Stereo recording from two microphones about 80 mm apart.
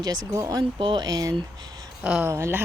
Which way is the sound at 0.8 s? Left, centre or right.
Right.